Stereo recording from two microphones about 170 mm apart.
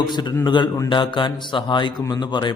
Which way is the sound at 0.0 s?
25° left (ahead or behind).